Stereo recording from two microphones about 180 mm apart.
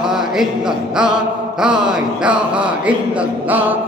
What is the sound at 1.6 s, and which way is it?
Speech, 5° right (ahead or behind).